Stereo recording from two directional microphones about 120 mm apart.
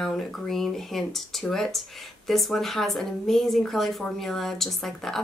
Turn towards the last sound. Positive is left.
turn(degrees=0)  # may be behind; listen again after turning